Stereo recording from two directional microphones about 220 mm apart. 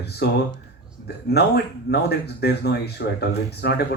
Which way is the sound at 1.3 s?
50° left (ahead or behind).